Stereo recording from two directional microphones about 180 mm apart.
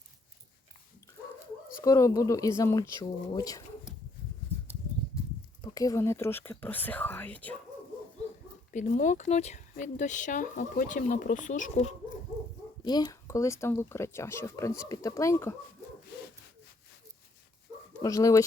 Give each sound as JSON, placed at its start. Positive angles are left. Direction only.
{"t": 1.7, "sound": "speech", "side_deg": 15}
{"t": 5.6, "sound": "speech", "side_deg": 20}
{"t": 8.7, "sound": "speech", "side_deg": 45}
{"t": 12.8, "sound": "speech", "side_deg": 20}
{"t": 18.0, "sound": "speech", "side_deg": 20}